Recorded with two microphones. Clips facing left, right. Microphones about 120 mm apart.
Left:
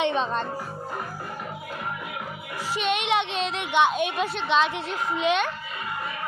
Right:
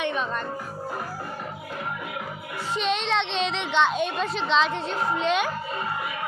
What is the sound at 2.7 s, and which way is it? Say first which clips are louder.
A woman's voice: left 1 dB; 5° left (ahead or behind).